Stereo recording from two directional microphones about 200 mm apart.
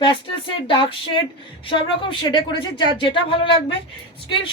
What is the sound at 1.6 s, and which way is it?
A woman's voice, 25° left (ahead or behind).